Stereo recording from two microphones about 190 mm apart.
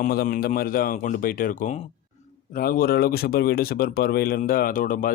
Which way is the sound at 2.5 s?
50° left (ahead or behind).